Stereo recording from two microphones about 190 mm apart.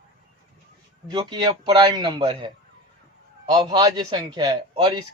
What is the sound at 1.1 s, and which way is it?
A man's voice, 25° right (ahead or behind).